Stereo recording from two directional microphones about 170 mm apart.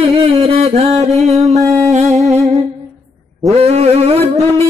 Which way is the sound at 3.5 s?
40° right (ahead or behind).